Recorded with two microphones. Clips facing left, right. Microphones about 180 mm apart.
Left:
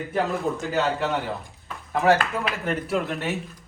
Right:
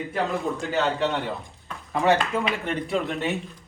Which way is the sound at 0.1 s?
Centre (ahead or behind).